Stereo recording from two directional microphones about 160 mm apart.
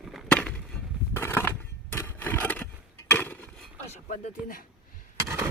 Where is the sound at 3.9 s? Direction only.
45° left (ahead or behind).